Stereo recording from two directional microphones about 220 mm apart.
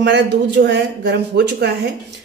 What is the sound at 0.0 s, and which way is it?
A man's voice, 50° right (ahead or behind).